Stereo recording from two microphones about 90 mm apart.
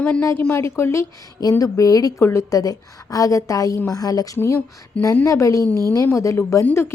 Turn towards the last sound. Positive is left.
turn(degrees=25)  # may be behind; listen again after turning